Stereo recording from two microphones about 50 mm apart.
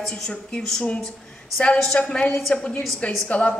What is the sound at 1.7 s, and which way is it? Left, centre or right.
A woman's voice, centre.